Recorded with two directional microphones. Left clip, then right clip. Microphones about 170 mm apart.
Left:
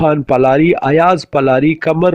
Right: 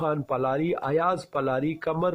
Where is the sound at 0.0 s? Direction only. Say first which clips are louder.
Left 15 dB; 40° left (ahead or behind).